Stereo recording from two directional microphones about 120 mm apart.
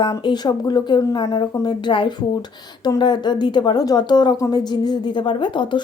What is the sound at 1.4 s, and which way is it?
Speech, 40° left (ahead or behind).